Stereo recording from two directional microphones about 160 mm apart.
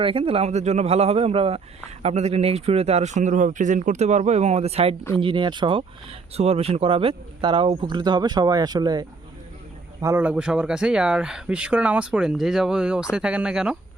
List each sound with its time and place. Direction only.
0.0 s a man's voice: 35° right (ahead or behind); by 13.7 s 5° right (ahead or behind)